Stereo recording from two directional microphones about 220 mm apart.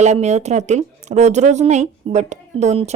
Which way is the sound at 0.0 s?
30° right (ahead or behind).